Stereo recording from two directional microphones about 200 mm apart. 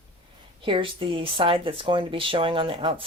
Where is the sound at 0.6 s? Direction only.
25° right (ahead or behind).